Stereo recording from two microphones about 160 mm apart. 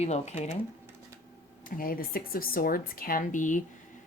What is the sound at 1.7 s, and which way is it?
Speech, 65° left (ahead or behind).